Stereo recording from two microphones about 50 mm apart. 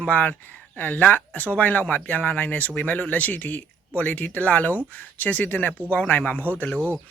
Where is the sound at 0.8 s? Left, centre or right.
Left.